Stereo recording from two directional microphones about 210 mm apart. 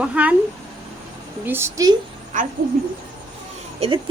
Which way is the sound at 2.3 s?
35° right (ahead or behind).